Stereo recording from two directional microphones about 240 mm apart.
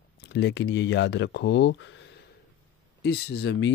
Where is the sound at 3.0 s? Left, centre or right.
Left.